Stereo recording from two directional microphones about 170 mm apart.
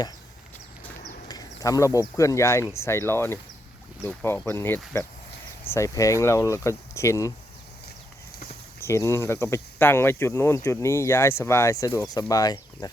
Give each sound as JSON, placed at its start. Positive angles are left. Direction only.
{"t": 1.3, "sound": "speech", "side_deg": 20}
{"t": 8.8, "sound": "speech", "side_deg": 15}